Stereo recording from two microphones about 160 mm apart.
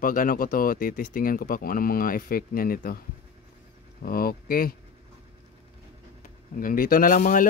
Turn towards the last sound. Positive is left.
turn(degrees=55)  # may be behind; listen again after turning